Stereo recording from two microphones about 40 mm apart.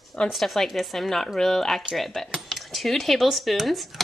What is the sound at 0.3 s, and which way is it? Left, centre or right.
A woman's voice, centre.